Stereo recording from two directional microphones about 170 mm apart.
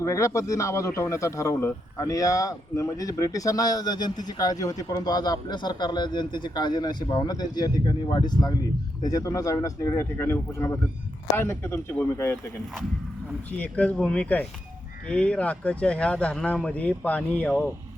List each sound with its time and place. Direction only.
0.0 s a man's voice: 15° left (ahead or behind)
13.6 s speech: 10° left (ahead or behind)